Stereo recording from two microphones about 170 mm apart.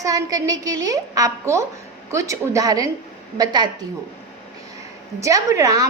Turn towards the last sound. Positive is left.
turn(degrees=-20)  # may be behind; listen again after turning